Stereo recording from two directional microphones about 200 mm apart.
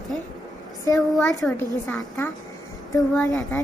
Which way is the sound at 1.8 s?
10° left (ahead or behind).